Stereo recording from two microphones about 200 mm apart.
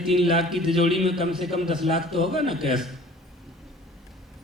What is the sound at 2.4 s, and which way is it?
Speech, 25° right (ahead or behind).